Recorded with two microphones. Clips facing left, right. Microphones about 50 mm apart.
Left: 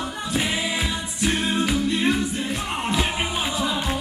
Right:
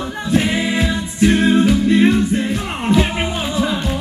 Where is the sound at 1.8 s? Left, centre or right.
Right.